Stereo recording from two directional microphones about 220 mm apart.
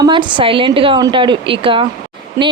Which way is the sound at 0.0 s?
20° right (ahead or behind).